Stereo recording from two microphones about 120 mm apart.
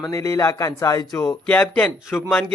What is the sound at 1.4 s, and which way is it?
A man's voice, 10° left (ahead or behind).